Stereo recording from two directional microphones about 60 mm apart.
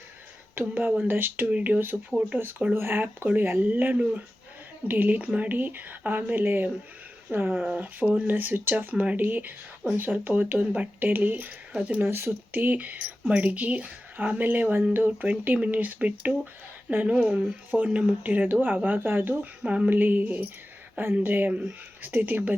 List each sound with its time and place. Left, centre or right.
0.5 s speech: right
7.7 s speech: right
11.9 s speech: right
19.6 s speech: centre
19.9 s speech: right
21.5 s speech: centre
22.0 s speech: right